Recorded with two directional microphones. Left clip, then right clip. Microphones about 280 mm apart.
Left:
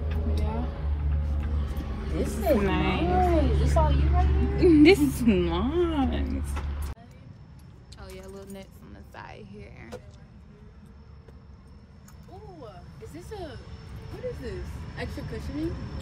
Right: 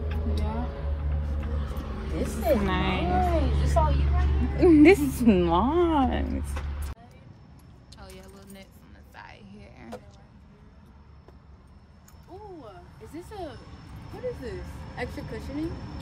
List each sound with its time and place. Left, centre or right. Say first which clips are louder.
0.1 s vehicle: left 1 dB; right
3.0 s speech: left 4 dB; right
4.5 s speech: right 1 dB; centre
4.8 s a woman's voice: right 1 dB; right
6.3 s a sound: even; right
8.0 s a sound: left 5 dB; centre
13.1 s speech: right 2 dB; right